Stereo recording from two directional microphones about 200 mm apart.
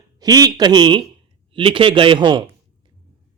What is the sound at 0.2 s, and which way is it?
A man's voice, 20° right (ahead or behind).